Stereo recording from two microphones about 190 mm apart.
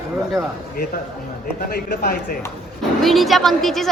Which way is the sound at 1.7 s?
50° left (ahead or behind).